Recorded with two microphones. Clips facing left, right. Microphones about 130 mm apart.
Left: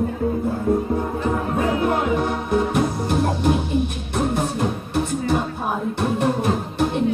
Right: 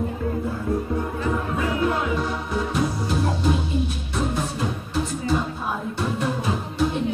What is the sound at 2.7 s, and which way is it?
Music, 60° left (ahead or behind).